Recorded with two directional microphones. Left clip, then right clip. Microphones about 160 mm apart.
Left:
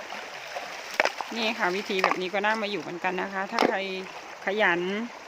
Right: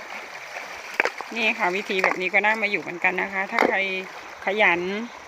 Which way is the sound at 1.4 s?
Centre (ahead or behind).